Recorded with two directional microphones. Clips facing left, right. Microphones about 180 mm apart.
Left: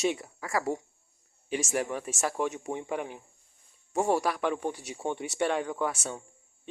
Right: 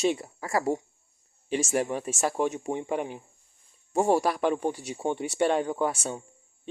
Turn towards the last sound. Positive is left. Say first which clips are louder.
# right 3 dB
turn(degrees=-30)  # may be behind; listen again after turning